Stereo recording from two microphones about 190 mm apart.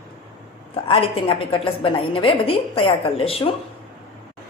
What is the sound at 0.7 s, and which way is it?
A woman's voice, 30° left (ahead or behind).